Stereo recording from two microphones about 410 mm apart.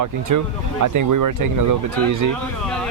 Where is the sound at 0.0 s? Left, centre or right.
Right.